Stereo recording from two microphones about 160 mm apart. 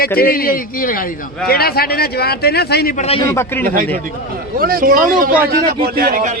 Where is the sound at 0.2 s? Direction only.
65° left (ahead or behind); by 2.9 s 85° left.